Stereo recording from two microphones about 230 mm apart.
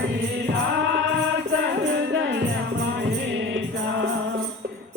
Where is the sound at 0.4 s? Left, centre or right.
Right.